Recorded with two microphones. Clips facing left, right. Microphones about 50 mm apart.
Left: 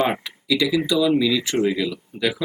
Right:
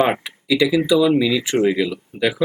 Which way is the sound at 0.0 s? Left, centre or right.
Centre.